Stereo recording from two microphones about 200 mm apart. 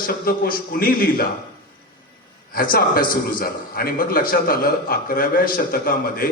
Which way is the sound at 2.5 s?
45° left (ahead or behind).